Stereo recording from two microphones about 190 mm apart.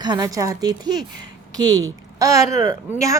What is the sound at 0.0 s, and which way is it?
A woman's voice, 20° right (ahead or behind).